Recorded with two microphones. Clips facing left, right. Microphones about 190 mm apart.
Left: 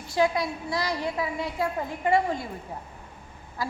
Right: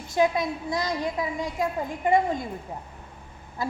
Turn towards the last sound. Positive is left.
turn(degrees=-20)  # may be behind; listen again after turning